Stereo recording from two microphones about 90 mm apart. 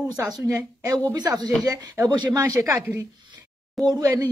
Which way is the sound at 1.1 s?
50° right (ahead or behind).